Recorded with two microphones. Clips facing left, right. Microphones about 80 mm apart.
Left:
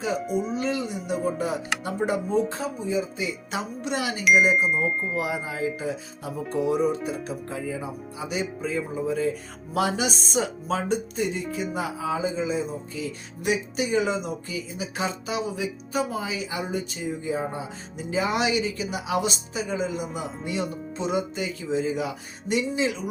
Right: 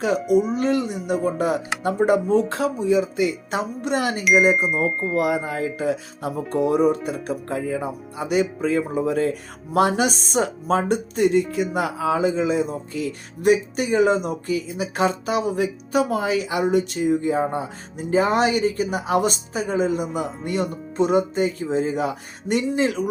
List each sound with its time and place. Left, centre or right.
0.3 s speech: centre
0.5 s speech: right
4.5 s speech: centre
5.1 s speech: right
9.7 s speech: right